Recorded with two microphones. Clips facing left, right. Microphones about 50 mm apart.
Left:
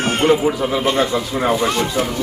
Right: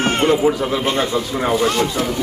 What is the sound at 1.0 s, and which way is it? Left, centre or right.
Speech, centre.